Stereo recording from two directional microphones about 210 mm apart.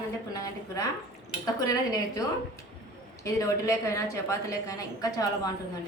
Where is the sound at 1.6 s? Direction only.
15° left (ahead or behind).